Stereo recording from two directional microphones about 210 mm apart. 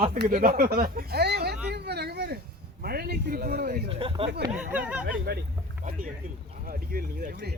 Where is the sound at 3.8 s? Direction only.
25° right (ahead or behind).